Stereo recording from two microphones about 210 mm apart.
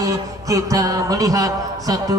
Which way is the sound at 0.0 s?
15° right (ahead or behind).